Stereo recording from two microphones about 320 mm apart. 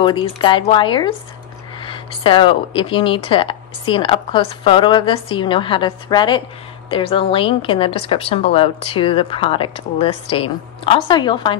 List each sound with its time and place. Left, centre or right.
0.0 s speech: centre